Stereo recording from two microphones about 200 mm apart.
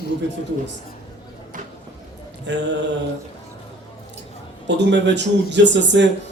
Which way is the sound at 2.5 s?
60° right (ahead or behind).